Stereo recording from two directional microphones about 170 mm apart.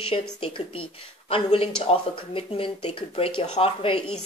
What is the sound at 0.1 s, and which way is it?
Speech, 30° left (ahead or behind).